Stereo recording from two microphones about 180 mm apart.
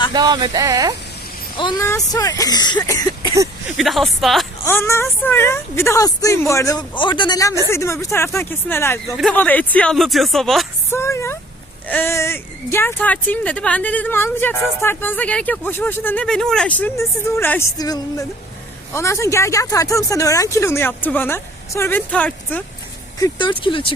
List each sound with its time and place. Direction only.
0.1 s speech: 25° right (ahead or behind)
1.8 s speech: 15° left (ahead or behind)
2.7 s a sound: 20° left (ahead or behind)
3.8 s speech: centre (ahead or behind)
4.6 s speech: 15° left (ahead or behind)
10.8 s speech: 15° left (ahead or behind)
23.2 s speech: 25° left (ahead or behind)